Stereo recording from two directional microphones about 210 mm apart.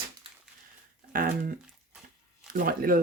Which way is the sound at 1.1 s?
40° right (ahead or behind).